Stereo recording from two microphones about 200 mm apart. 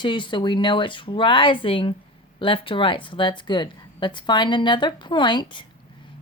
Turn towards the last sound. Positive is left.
turn(degrees=20)  # may be behind; listen again after turning